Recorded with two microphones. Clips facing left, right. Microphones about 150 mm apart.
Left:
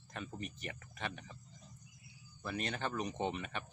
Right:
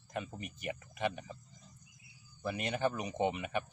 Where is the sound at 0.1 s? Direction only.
15° right (ahead or behind).